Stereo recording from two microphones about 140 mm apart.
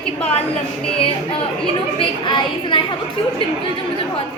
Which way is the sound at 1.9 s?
35° left (ahead or behind).